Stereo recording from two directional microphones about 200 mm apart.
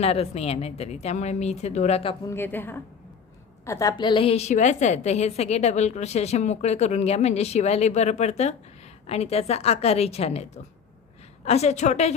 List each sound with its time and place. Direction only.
0.0 s a woman's voice: 30° left (ahead or behind)
2.2 s a woman's voice: 10° left (ahead or behind); by 12.1 s 35° left (ahead or behind)